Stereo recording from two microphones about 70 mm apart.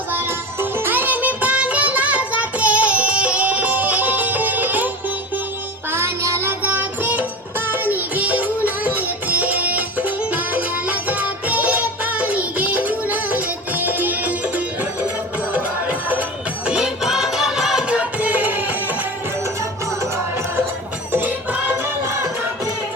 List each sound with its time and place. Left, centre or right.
0.6 s music: right
5.9 s music: right
6.6 s child singing: right
7.7 s music: right
16.6 s music: centre; by 18.6 s right
21.1 s music: right